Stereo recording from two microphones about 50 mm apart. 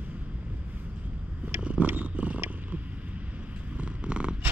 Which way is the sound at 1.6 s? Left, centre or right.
Right.